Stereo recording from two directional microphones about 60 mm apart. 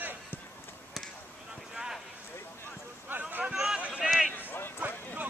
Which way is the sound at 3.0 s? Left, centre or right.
Right.